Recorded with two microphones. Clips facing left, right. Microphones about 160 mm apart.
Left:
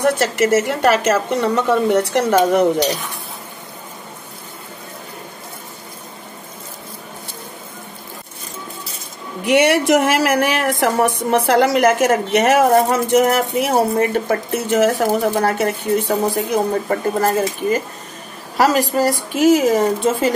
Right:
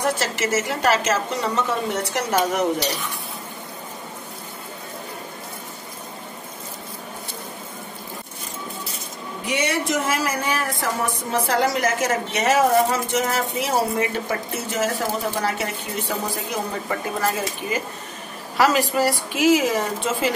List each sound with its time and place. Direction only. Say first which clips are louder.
0.2 s a woman's voice: left 8 dB; 55° left (ahead or behind)
9.5 s speech: left 10 dB; 70° left (ahead or behind); by 14.3 s 50° left (ahead or behind)
14.7 s a woman's voice: left 9 dB; 65° left (ahead or behind)
15.3 s speech: left 7 dB; 50° left (ahead or behind)